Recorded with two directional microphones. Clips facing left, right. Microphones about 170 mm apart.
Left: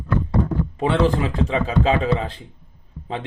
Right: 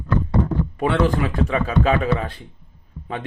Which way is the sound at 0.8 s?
25° left (ahead or behind).